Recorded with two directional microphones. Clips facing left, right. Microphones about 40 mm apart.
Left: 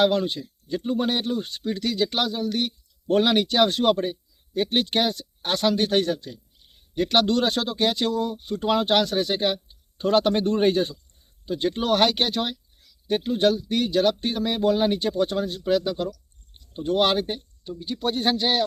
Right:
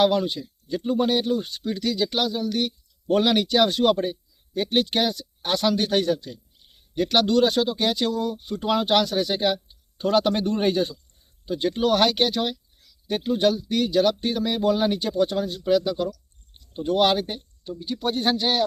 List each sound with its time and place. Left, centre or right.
0.0 s speech: centre
10.6 s speech: centre
13.7 s speech: left
16.7 s speech: centre
17.0 s speech: left